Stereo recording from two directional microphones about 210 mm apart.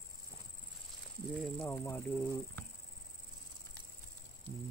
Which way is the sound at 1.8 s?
10° left (ahead or behind).